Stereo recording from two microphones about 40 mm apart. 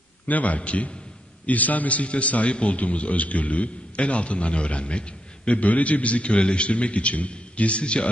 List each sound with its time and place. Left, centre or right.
0.3 s a man's voice: left